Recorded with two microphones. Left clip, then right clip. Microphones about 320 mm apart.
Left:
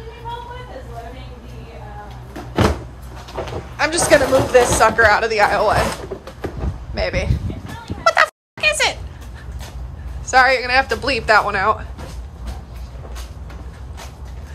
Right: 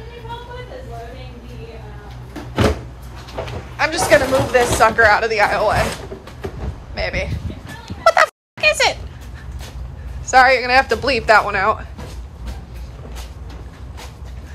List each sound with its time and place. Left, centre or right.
3.7 s speech: centre
7.0 s speech: centre
7.8 s fowl: centre
10.2 s speech: centre